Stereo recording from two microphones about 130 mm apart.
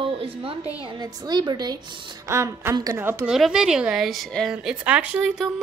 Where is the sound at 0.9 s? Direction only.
30° right (ahead or behind).